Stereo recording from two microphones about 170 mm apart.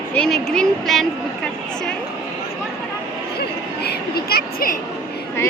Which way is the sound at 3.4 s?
70° left (ahead or behind).